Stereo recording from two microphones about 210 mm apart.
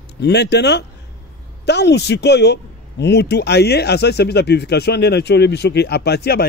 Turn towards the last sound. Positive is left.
turn(degrees=50)  # may be behind; listen again after turning